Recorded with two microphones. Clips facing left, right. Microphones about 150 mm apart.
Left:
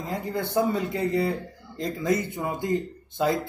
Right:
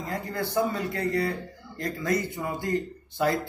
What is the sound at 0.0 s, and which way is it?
Speech, 20° left (ahead or behind).